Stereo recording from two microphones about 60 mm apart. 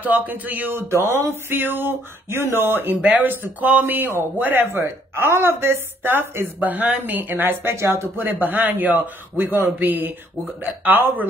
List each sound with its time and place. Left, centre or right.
0.0 s a man's voice: right
7.7 s speech: right
8.2 s a man's voice: right